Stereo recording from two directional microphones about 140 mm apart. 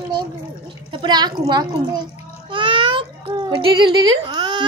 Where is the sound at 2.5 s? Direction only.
40° right (ahead or behind).